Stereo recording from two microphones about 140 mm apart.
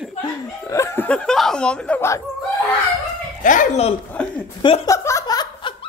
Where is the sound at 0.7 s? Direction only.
20° left (ahead or behind).